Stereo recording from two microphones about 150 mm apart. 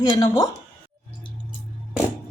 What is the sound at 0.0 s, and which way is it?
Speech, 25° left (ahead or behind).